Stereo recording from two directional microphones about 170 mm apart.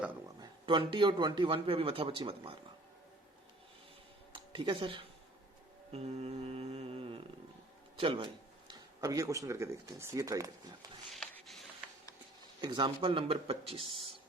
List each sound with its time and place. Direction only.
0.3 s speech: 30° right (ahead or behind)
4.3 s a sound: 30° right (ahead or behind)
5.9 s mantra: 40° right (ahead or behind)
7.9 s speech: 30° right (ahead or behind)
11.1 s a sound: centre (ahead or behind)
12.6 s speech: 25° right (ahead or behind)